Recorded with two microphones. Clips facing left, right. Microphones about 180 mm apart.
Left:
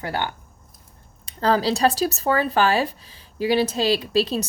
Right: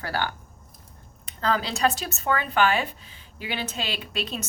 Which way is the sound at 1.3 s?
35° left (ahead or behind).